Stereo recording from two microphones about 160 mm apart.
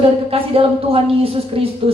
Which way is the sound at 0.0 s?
35° right (ahead or behind).